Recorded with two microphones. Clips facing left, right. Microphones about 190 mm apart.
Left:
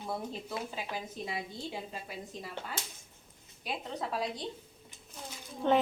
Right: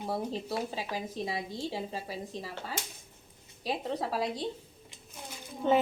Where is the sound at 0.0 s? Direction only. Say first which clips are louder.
Right 4 dB; 35° right (ahead or behind).